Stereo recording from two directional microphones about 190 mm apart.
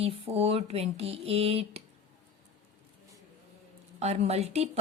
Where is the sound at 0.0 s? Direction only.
30° right (ahead or behind).